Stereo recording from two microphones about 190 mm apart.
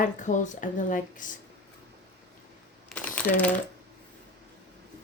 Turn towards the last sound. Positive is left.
turn(degrees=10)  # may be behind; listen again after turning